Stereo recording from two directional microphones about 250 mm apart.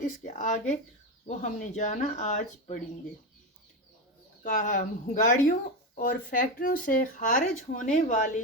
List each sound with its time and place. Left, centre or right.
0.0 s speech: left
4.4 s speech: left